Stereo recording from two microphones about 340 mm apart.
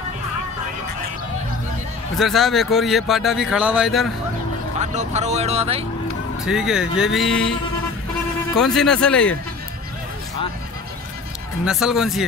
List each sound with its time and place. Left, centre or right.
2.1 s speech: centre
4.7 s speech: centre
6.4 s speech: centre
8.5 s speech: centre
11.6 s speech: centre